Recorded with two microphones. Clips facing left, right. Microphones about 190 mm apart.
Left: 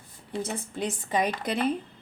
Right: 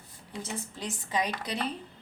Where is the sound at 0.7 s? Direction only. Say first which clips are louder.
Left 5 dB; 55° left (ahead or behind).